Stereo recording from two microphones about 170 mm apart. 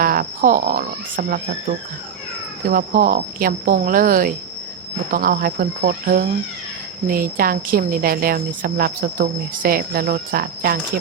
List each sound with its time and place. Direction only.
0.0 s speech: 60° right (ahead or behind)
2.6 s speech: 55° right (ahead or behind)